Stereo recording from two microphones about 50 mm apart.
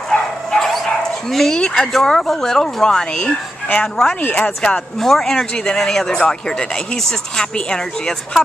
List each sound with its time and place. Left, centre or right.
0.1 s dog: centre
1.6 s speech: centre
1.9 s speech: centre